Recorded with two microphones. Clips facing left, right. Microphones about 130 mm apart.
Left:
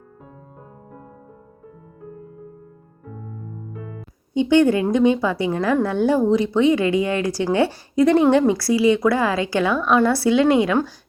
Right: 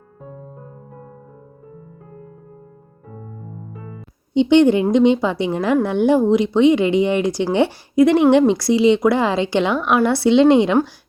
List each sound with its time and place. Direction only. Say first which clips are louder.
4.4 s a woman's voice: right 3 dB; 20° right (ahead or behind)